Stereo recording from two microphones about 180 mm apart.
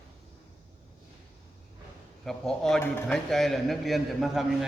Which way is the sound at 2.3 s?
Centre (ahead or behind).